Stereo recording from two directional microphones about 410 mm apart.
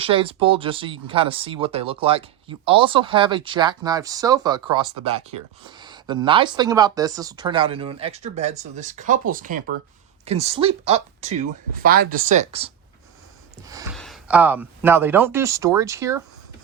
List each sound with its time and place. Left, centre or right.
0.0 s speech: centre